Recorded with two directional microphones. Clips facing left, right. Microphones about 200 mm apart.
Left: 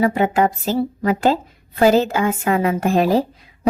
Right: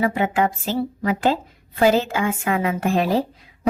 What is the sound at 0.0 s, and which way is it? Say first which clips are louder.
A woman's voice: left 3 dB; 40° left (ahead or behind).